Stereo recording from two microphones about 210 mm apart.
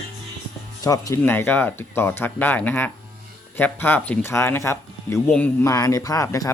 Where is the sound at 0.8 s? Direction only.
15° left (ahead or behind).